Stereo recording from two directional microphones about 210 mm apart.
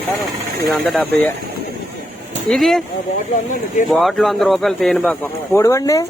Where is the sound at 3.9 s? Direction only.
Centre (ahead or behind).